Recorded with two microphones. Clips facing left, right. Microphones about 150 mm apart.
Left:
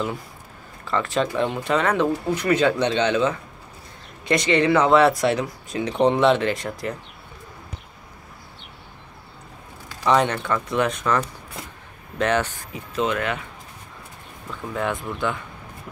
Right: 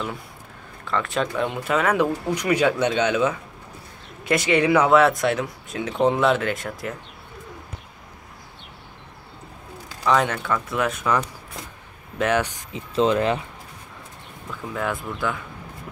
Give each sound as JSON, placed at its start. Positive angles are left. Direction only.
{"t": 0.8, "sound": "speech", "side_deg": 0}
{"t": 10.0, "sound": "speech", "side_deg": 0}
{"t": 12.9, "sound": "speech", "side_deg": -30}
{"t": 14.5, "sound": "speech", "side_deg": 0}